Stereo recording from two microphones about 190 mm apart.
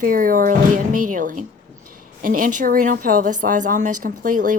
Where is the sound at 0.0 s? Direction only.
45° right (ahead or behind).